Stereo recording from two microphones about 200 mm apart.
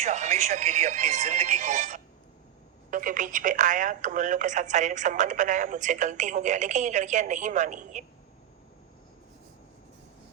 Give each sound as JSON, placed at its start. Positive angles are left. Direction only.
{"t": 0.0, "sound": "speech", "side_deg": -35}